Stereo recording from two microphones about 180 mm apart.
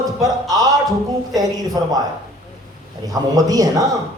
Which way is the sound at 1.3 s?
20° right (ahead or behind).